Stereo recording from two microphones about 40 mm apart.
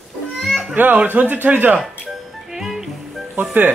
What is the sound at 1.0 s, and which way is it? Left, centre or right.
Speech, right.